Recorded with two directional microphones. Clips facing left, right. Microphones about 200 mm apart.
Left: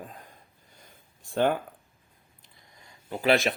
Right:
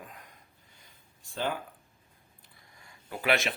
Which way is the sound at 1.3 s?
55° left (ahead or behind).